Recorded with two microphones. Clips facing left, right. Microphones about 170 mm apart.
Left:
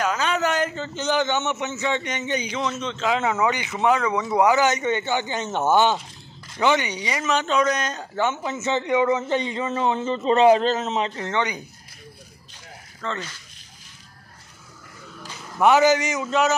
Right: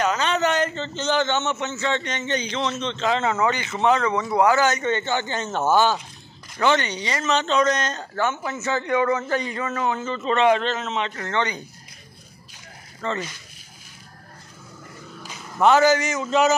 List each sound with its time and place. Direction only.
0.0 s a man's voice: 5° left (ahead or behind); by 11.1 s 35° left (ahead or behind)
11.1 s a man's voice: 15° left (ahead or behind)
13.0 s speech: 5° right (ahead or behind)
15.6 s a man's voice: 15° left (ahead or behind)
16.3 s speech: centre (ahead or behind)